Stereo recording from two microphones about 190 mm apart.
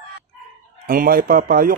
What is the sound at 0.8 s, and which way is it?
Speech, 50° right (ahead or behind).